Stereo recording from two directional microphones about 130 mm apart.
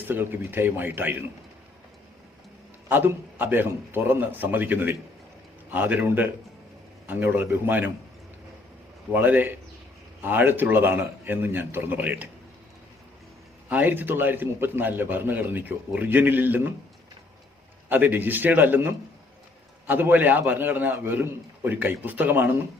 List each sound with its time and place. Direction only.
0.1 s a man's voice: 15° right (ahead or behind)
2.9 s a man's voice: 15° right (ahead or behind)
9.1 s a man's voice: 15° right (ahead or behind)
13.7 s a man's voice: 15° right (ahead or behind)
17.8 s a man's voice: 15° right (ahead or behind)